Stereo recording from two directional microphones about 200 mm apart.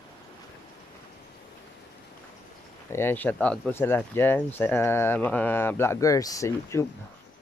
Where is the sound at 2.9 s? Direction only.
10° left (ahead or behind).